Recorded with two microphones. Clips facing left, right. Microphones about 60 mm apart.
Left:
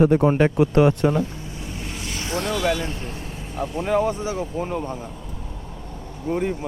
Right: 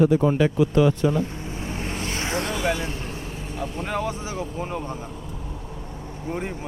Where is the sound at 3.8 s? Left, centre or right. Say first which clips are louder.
Left 8 dB; left.